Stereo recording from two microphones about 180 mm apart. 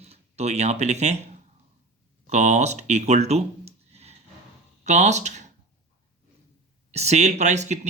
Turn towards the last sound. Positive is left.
turn(degrees=-40)  # may be behind; listen again after turning